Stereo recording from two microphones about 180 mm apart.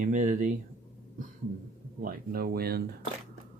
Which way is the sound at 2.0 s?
55° right (ahead or behind).